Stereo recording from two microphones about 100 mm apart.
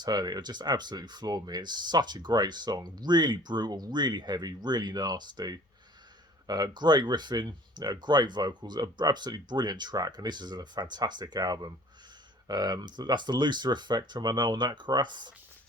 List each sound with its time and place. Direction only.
0.0 s speech: 40° right (ahead or behind)